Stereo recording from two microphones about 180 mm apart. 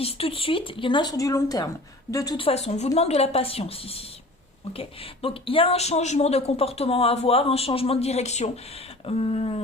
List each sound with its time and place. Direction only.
0.0 s speech: 35° left (ahead or behind)